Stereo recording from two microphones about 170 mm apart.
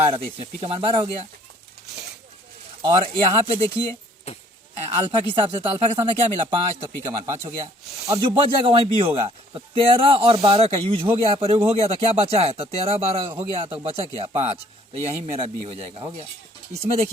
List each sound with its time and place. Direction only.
0.3 s speech: 35° right (ahead or behind)
2.8 s speech: 30° right (ahead or behind)
4.8 s speech: 30° right (ahead or behind)
7.3 s speech: 20° right (ahead or behind); by 16.0 s 35° right (ahead or behind)